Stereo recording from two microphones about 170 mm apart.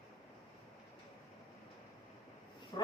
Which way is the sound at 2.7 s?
30° left (ahead or behind).